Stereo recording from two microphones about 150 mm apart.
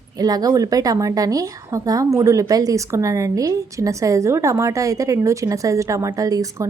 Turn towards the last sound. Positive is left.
turn(degrees=-25)  # may be behind; listen again after turning